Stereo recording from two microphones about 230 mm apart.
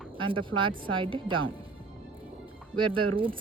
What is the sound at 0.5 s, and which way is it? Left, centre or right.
Speech, right.